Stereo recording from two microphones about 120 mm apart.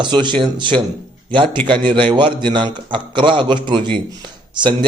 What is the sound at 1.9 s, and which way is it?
A man's voice, 40° right (ahead or behind).